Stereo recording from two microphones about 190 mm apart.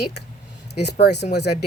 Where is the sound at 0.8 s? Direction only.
60° left (ahead or behind).